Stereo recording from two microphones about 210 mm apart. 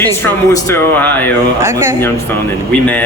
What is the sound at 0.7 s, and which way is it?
Speech, 10° left (ahead or behind).